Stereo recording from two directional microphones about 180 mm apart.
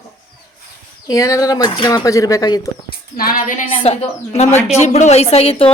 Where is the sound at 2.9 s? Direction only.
55° left (ahead or behind).